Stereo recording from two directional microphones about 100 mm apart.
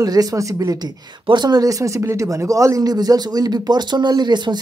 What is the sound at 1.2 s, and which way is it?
Speech, 50° right (ahead or behind).